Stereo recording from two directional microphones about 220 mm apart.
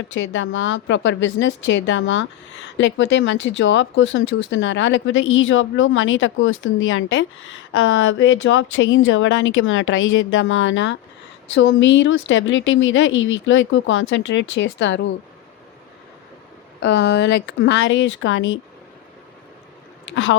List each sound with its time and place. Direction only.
0.1 s speech: 60° left (ahead or behind)
16.8 s speech: 55° left (ahead or behind)
20.1 s speech: 60° left (ahead or behind)